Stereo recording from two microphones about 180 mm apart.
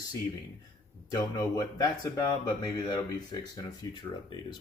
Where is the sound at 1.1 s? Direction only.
20° left (ahead or behind).